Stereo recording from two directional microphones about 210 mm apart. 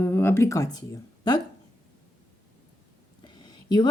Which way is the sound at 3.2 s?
20° left (ahead or behind).